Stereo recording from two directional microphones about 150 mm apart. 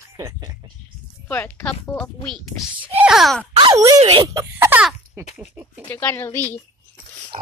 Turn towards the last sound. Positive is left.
turn(degrees=-50)  # may be behind; listen again after turning